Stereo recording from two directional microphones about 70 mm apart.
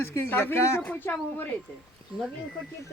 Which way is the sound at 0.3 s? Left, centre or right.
Left.